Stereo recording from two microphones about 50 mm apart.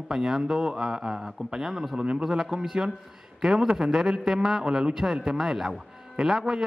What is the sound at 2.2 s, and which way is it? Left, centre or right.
Speech, centre.